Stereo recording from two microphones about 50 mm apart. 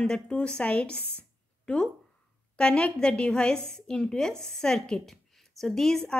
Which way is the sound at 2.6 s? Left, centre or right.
Centre.